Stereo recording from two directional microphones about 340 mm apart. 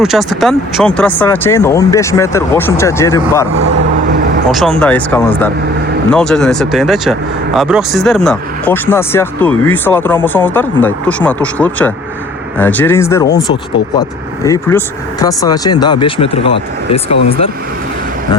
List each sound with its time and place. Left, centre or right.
0.0 s speech: centre
4.5 s speech: centre
14.4 s speech: centre